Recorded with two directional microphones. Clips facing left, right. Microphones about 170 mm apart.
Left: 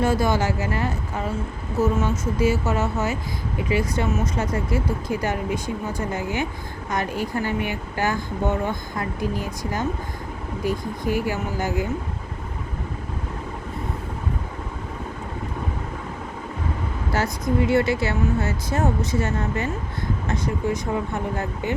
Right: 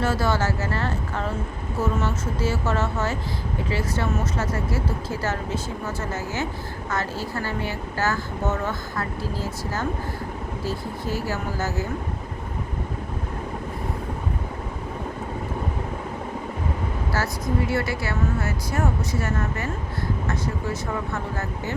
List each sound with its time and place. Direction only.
0.0 s speech: 15° left (ahead or behind)
17.1 s speech: 20° left (ahead or behind)